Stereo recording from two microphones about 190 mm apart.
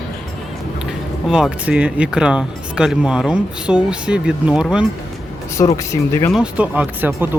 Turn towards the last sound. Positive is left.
turn(degrees=-10)  # may be behind; listen again after turning